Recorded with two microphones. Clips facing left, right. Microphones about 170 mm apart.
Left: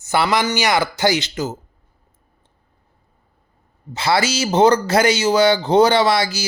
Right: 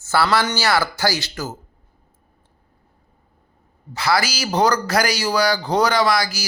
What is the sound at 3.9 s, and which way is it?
Speech, 25° left (ahead or behind).